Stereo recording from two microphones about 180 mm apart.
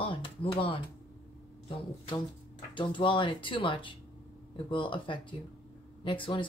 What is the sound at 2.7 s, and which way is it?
Speech, 25° left (ahead or behind).